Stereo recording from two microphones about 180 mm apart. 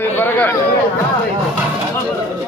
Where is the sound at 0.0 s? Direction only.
10° left (ahead or behind).